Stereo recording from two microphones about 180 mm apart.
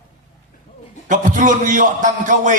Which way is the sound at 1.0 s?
45° right (ahead or behind).